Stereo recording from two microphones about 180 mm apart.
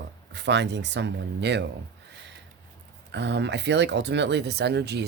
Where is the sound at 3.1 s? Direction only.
75° right (ahead or behind).